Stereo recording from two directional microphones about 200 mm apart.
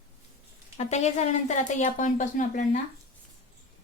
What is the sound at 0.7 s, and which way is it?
Speech, 35° left (ahead or behind).